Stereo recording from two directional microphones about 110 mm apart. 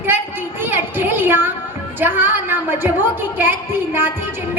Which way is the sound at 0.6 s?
20° right (ahead or behind).